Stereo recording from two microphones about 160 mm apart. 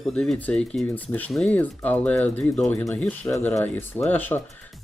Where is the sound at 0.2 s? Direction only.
5° left (ahead or behind).